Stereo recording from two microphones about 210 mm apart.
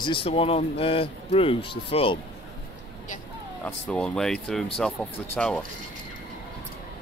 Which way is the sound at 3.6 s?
5° left (ahead or behind).